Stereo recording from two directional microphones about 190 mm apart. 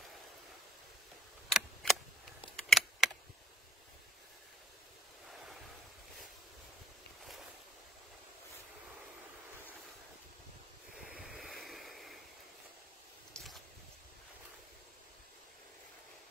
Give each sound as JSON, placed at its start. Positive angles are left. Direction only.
{"t": 1.5, "sound": "a sound", "side_deg": 0}
{"t": 2.5, "sound": "computer keyboard", "side_deg": 0}
{"t": 11.0, "sound": "waves", "side_deg": -5}